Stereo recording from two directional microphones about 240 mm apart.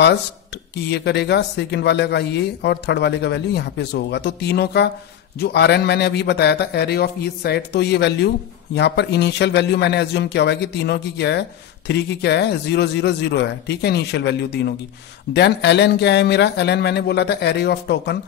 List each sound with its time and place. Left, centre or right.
0.8 s speech: left